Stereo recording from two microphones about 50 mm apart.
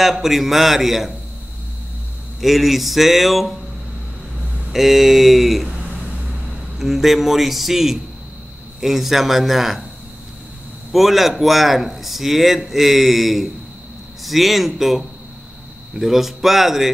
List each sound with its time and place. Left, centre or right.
0.0 s speech: centre
2.4 s speech: centre
4.7 s speech: centre
6.8 s speech: centre
10.9 s speech: centre